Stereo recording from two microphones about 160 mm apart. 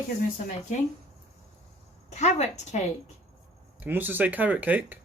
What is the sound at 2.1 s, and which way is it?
Speech, 45° left (ahead or behind).